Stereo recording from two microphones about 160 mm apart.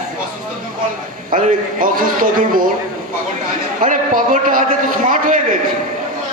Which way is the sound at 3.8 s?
55° right (ahead or behind).